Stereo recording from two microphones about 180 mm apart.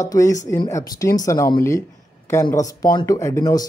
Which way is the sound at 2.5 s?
20° left (ahead or behind).